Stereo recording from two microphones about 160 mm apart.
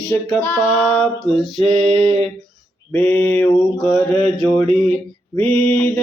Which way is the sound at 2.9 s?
5° left (ahead or behind).